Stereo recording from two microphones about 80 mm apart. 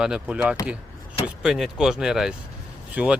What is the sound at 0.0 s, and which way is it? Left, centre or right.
Speech, centre.